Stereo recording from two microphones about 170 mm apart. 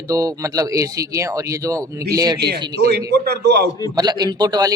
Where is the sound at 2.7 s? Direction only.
65° right (ahead or behind).